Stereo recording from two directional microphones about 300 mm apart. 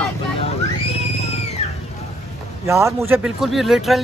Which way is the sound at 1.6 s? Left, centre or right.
Left.